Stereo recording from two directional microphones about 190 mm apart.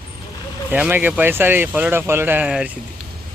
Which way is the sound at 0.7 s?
10° right (ahead or behind).